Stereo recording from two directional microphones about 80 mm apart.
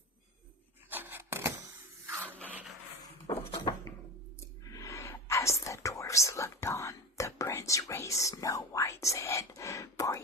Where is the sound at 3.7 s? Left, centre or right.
Left.